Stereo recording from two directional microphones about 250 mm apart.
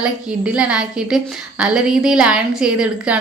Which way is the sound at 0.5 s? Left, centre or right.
Centre.